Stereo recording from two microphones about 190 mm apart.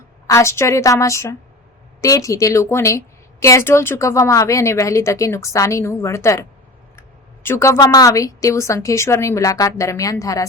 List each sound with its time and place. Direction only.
0.3 s speech: 15° left (ahead or behind)